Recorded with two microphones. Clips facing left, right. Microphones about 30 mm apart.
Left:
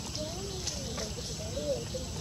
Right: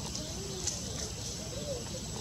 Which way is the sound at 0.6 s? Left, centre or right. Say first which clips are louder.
Left 2 dB; left.